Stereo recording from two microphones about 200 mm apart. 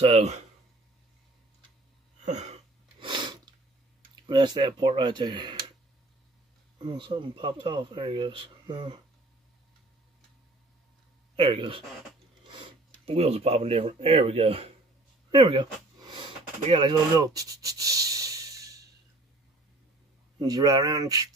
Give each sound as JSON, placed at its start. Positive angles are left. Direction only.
{"t": 0.0, "sound": "speech", "side_deg": -30}
{"t": 2.2, "sound": "sneeze", "side_deg": -35}
{"t": 4.3, "sound": "speech", "side_deg": -20}
{"t": 6.8, "sound": "speech", "side_deg": -25}
{"t": 11.3, "sound": "speech", "side_deg": -25}
{"t": 15.3, "sound": "a sound", "side_deg": -25}
{"t": 20.3, "sound": "speech", "side_deg": -20}